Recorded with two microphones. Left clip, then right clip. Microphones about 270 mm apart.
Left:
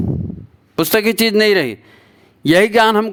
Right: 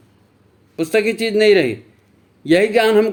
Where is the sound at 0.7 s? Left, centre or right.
Left.